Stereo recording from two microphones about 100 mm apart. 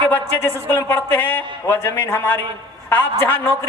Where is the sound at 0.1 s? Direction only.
25° left (ahead or behind).